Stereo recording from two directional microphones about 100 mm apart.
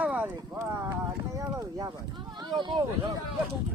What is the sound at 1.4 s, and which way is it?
Speech, 35° right (ahead or behind).